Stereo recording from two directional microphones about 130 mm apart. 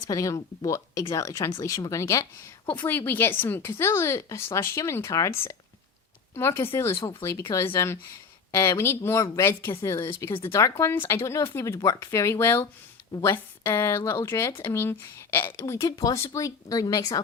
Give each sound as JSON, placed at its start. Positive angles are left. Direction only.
{"t": 0.1, "sound": "a woman's voice", "side_deg": 25}